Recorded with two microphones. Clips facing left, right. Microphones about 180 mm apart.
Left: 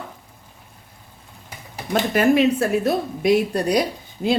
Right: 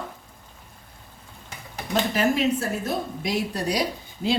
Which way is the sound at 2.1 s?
60° left (ahead or behind).